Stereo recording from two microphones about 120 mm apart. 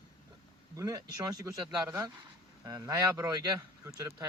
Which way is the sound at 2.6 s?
30° right (ahead or behind).